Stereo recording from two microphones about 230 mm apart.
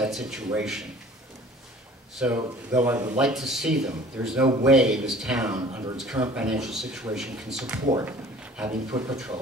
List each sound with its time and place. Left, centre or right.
0.0 s speech: centre
2.1 s a man's voice: centre